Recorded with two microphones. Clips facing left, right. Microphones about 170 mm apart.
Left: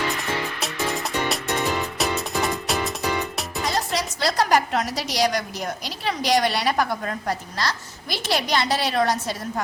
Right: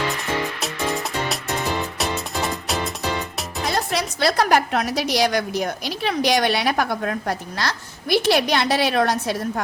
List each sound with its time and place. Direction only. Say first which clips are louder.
0.6 s music: right 2 dB; centre (ahead or behind)
3.7 s a woman's voice: right 3 dB; 60° right (ahead or behind)